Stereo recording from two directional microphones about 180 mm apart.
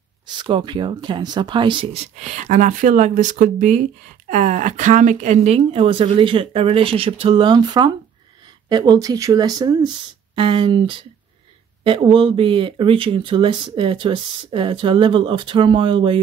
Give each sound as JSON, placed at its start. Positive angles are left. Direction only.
{"t": 0.4, "sound": "speech", "side_deg": -25}
{"t": 2.1, "sound": "a woman's voice", "side_deg": -40}